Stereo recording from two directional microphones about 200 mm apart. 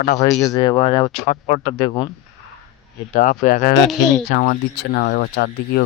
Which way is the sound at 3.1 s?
40° left (ahead or behind).